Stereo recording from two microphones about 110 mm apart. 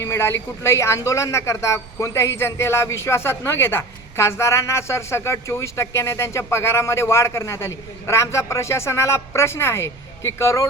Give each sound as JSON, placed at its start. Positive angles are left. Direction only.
{"t": 0.0, "sound": "speech", "side_deg": 20}